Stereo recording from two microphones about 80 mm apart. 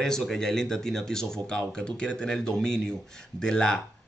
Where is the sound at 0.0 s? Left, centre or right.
Centre.